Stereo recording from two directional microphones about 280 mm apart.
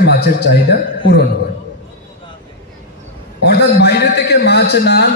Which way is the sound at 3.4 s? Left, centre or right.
Left.